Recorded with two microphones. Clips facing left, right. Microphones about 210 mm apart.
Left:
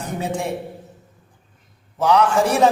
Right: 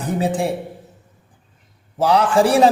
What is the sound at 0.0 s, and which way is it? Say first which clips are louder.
Speech: right 5 dB; 35° right (ahead or behind).